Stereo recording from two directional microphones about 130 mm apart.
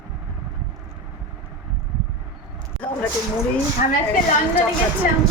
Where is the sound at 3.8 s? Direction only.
75° left (ahead or behind).